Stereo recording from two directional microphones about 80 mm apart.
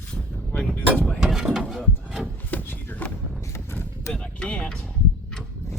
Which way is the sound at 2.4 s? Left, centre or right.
Left.